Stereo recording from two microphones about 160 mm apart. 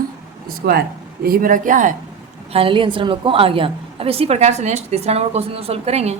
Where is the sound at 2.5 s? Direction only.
35° right (ahead or behind).